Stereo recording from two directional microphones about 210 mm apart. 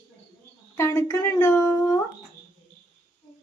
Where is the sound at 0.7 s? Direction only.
10° left (ahead or behind).